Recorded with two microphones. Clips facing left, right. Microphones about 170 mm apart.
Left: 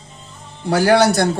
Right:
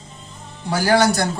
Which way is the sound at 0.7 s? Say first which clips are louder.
Left 5 dB; 65° left (ahead or behind).